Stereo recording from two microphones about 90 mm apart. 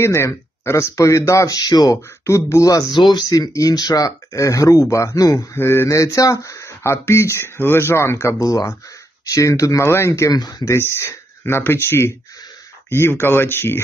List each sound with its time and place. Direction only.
0.0 s speech: 30° left (ahead or behind); by 2.0 s 45° left (ahead or behind)
2.0 s speech: 35° left (ahead or behind)
2.9 s speech: 55° left (ahead or behind); by 10.3 s 30° left (ahead or behind)
10.3 s speech: 45° left (ahead or behind)
10.7 s speech: 30° left (ahead or behind)